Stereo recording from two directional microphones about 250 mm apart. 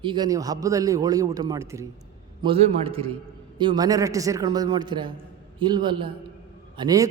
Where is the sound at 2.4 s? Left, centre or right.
Right.